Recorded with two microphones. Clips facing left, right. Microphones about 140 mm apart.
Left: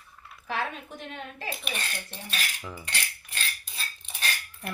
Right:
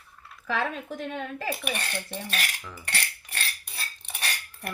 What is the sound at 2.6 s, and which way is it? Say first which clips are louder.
Cutlery: left 3 dB; 15° left (ahead or behind).